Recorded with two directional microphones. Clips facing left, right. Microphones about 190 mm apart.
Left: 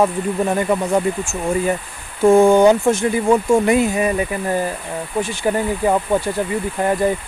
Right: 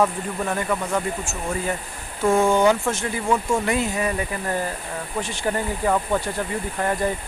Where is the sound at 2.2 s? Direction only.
30° left (ahead or behind).